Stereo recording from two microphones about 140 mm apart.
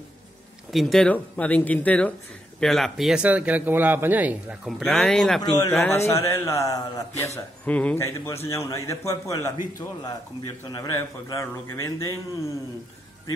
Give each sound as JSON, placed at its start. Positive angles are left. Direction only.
{"t": 0.7, "sound": "speech", "side_deg": 0}
{"t": 4.6, "sound": "a man's voice", "side_deg": 0}
{"t": 5.4, "sound": "a man's voice", "side_deg": 30}
{"t": 5.7, "sound": "a man's voice", "side_deg": 15}
{"t": 7.6, "sound": "a man's voice", "side_deg": 10}
{"t": 10.7, "sound": "a man's voice", "side_deg": 25}